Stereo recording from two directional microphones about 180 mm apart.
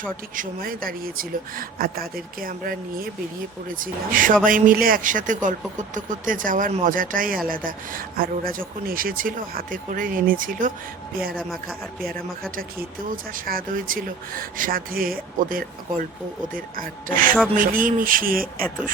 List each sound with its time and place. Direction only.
0.3 s speech: 50° right (ahead or behind)
11.3 s speech: centre (ahead or behind)
13.1 s speech: 50° right (ahead or behind)